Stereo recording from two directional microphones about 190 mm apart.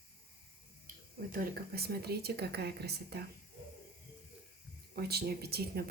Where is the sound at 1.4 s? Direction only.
55° right (ahead or behind).